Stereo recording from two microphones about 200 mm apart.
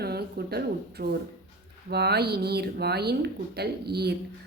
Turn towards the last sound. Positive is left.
turn(degrees=-55)  # may be behind; listen again after turning